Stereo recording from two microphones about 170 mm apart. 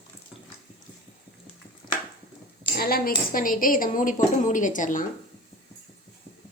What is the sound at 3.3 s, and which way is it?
A woman's voice, 55° left (ahead or behind).